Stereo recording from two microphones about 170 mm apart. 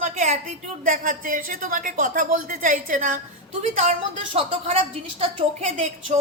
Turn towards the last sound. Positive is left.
turn(degrees=-40)  # may be behind; listen again after turning